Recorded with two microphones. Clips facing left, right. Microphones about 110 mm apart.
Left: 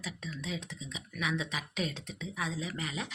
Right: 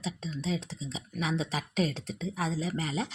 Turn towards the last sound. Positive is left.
turn(degrees=-35)  # may be behind; listen again after turning